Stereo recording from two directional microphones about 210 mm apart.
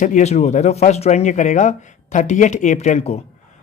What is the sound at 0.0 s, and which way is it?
Speech, 35° left (ahead or behind).